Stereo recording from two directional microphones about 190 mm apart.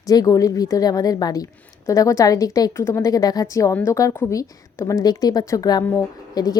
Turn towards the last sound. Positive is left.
turn(degrees=15)  # may be behind; listen again after turning